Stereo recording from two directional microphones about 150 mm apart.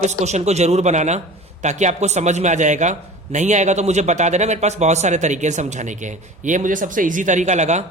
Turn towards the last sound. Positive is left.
turn(degrees=-50)  # may be behind; listen again after turning